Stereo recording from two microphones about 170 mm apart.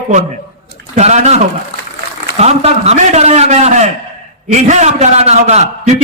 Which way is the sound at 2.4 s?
40° right (ahead or behind).